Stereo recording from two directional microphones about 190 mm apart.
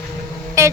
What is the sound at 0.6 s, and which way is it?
Music, 15° right (ahead or behind).